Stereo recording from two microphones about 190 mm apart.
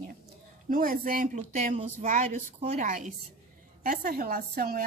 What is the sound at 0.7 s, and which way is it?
A woman's voice, 45° right (ahead or behind).